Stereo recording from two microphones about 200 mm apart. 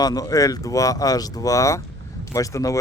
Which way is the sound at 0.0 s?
20° left (ahead or behind).